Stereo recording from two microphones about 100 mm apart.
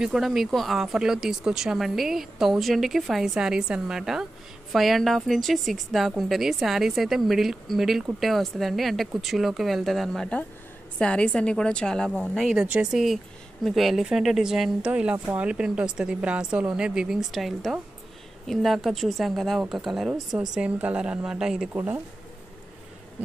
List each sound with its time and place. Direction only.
0.0 s a woman's voice: 5° right (ahead or behind)
21.7 s speech: 25° right (ahead or behind)